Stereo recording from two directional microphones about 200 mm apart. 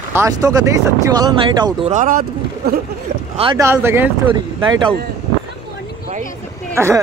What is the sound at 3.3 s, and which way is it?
Speech, 25° right (ahead or behind).